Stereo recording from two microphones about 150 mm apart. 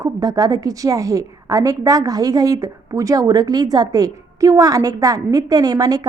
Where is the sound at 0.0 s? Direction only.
25° right (ahead or behind).